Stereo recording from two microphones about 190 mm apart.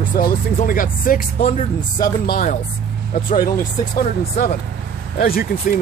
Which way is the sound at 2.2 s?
50° left (ahead or behind).